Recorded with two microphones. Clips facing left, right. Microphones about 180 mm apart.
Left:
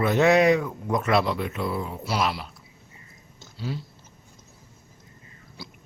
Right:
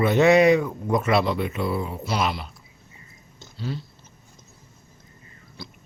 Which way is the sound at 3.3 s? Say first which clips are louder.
Right 1 dB; 10° left (ahead or behind).